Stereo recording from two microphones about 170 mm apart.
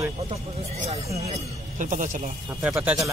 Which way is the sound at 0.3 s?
40° right (ahead or behind).